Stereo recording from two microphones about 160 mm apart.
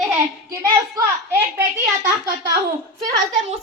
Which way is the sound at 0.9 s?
15° right (ahead or behind).